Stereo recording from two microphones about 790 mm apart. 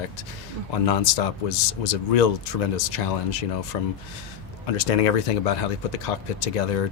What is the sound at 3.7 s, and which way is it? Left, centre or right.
Speech, left.